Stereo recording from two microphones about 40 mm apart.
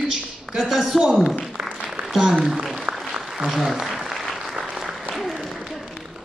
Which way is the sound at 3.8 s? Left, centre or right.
Centre.